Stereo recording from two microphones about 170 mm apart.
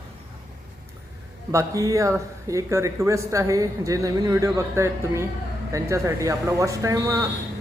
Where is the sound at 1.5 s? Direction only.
20° right (ahead or behind).